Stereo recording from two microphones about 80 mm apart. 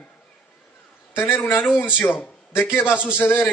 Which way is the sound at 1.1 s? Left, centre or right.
Left.